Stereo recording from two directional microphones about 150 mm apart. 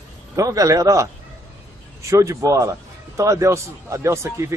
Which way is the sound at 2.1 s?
20° right (ahead or behind).